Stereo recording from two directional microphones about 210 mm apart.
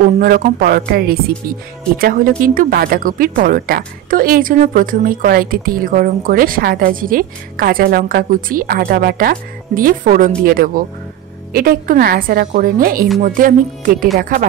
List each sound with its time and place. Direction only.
0.2 s a woman's voice: 45° right (ahead or behind)